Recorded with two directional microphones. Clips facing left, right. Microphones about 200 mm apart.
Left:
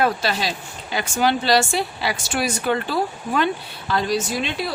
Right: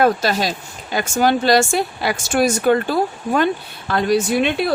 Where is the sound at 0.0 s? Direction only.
45° right (ahead or behind).